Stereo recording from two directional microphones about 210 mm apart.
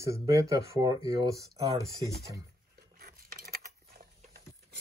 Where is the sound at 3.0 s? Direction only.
45° right (ahead or behind).